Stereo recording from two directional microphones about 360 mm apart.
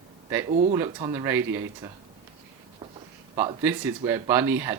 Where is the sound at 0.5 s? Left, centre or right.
Centre.